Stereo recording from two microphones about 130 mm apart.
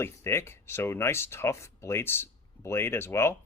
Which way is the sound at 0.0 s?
20° left (ahead or behind).